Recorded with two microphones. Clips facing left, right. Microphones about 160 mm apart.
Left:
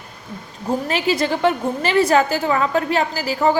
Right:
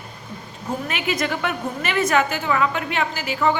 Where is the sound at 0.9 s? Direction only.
30° left (ahead or behind).